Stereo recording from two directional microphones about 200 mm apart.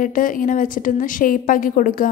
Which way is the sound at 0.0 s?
40° left (ahead or behind).